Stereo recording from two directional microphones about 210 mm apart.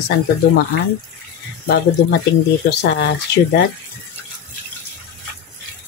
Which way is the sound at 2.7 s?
55° left (ahead or behind).